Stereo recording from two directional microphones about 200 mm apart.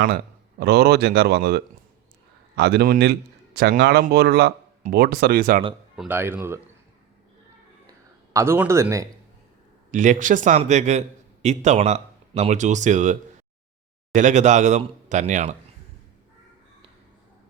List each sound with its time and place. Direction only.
0.6 s speech: 55° right (ahead or behind)
6.0 s speech: 10° right (ahead or behind)
7.9 s a sound: 15° right (ahead or behind)
9.9 s speech: 40° right (ahead or behind)